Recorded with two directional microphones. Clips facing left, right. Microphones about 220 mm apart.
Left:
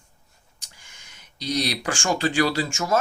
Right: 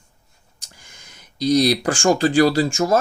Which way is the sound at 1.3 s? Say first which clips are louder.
Right 10 dB; 40° right (ahead or behind).